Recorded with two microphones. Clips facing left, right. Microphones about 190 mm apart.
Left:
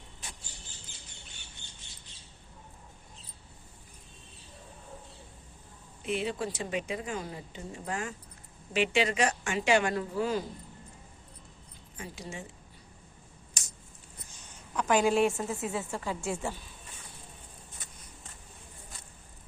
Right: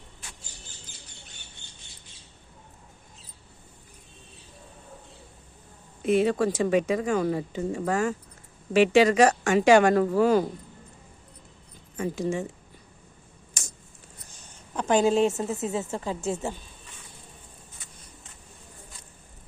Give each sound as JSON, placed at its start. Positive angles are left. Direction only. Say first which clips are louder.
{"t": 6.0, "sound": "speech", "louder": "right 10 dB", "side_deg": -45}
{"t": 7.1, "sound": "speech", "louder": "right 12 dB", "side_deg": -75}
{"t": 7.7, "sound": "speech", "louder": "right 9 dB", "side_deg": -90}
{"t": 8.7, "sound": "speech", "louder": "right 9 dB", "side_deg": -45}
{"t": 11.9, "sound": "speech", "louder": "right 14 dB", "side_deg": -50}
{"t": 14.8, "sound": "a woman's voice", "louder": "right 4 dB", "side_deg": -25}